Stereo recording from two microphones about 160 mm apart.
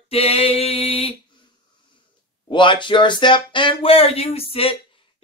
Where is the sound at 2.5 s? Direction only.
30° left (ahead or behind).